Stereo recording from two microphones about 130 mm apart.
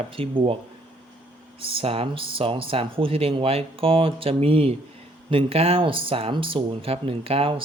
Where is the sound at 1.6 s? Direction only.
45° right (ahead or behind).